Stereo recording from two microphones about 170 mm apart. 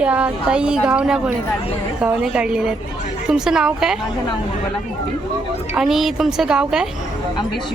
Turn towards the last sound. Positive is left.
turn(degrees=-5)  # may be behind; listen again after turning